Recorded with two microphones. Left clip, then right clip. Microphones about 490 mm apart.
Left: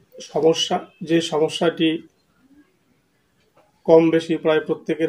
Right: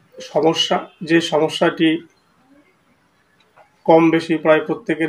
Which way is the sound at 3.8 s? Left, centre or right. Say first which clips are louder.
Right 1 dB; left.